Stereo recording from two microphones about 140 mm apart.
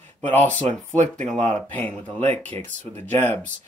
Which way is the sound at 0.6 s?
60° right (ahead or behind).